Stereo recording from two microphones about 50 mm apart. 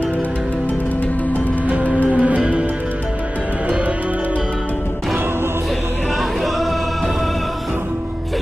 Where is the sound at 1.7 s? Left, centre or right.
Right.